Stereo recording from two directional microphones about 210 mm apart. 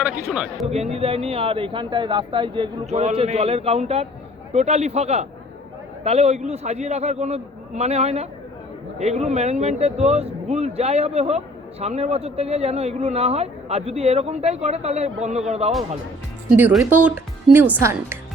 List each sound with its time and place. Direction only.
0.0 s speech: 5° right (ahead or behind)
0.7 s speech: 30° right (ahead or behind)
16.5 s a woman's voice: 5° right (ahead or behind)